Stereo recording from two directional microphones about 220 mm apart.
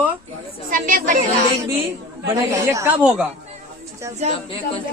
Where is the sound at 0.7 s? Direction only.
40° right (ahead or behind).